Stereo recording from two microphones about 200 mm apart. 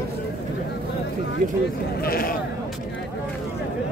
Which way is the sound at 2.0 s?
50° left (ahead or behind).